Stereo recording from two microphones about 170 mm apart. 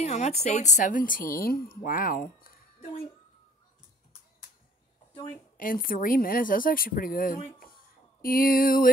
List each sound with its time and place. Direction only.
0.0 s a woman's voice: 40° left (ahead or behind); by 2.6 s 60° left (ahead or behind)
5.6 s speech: 55° left (ahead or behind)
7.6 s a sound: 60° left (ahead or behind)